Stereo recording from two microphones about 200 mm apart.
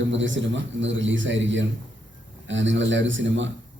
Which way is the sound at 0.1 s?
70° right (ahead or behind).